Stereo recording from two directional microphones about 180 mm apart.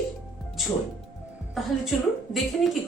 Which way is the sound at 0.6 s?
Centre (ahead or behind).